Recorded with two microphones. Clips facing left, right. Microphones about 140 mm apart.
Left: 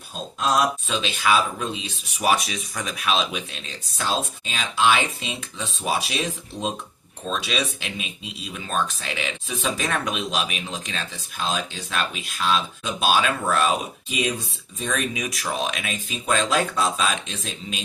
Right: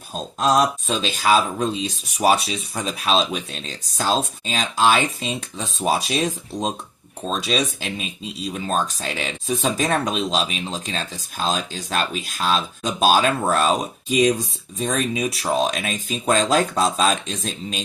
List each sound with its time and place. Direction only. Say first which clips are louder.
0.3 s speech: right 3 dB; 35° right (ahead or behind)